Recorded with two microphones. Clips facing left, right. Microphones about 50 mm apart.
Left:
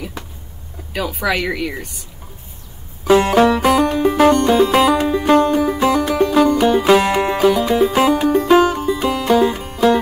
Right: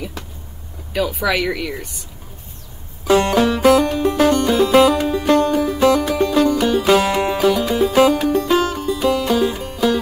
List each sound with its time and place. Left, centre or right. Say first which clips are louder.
0.9 s speech: right 1 dB; centre
3.1 s music: left 3 dB; centre